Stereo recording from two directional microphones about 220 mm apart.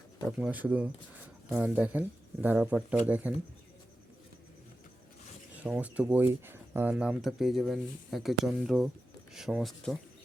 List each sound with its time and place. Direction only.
0.3 s speech: 5° right (ahead or behind)
5.6 s speech: 5° right (ahead or behind)